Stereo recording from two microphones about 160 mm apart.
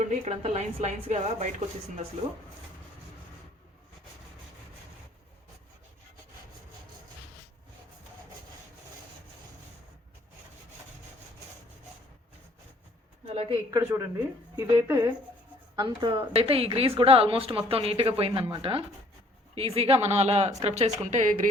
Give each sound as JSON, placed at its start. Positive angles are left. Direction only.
{"t": 0.1, "sound": "speech", "side_deg": -40}
{"t": 13.2, "sound": "a sound", "side_deg": -35}
{"t": 13.7, "sound": "a woman's voice", "side_deg": -15}
{"t": 15.7, "sound": "a woman's voice", "side_deg": -25}